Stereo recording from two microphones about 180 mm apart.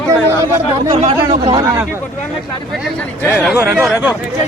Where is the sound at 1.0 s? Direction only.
30° right (ahead or behind).